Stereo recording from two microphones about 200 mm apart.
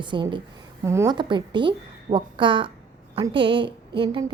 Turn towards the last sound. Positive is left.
turn(degrees=-25)  # may be behind; listen again after turning